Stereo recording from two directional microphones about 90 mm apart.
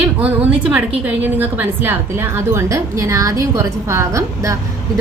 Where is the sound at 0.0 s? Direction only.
15° right (ahead or behind).